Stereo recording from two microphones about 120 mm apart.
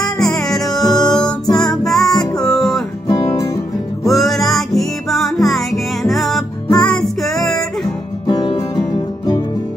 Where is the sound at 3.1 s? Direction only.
25° left (ahead or behind).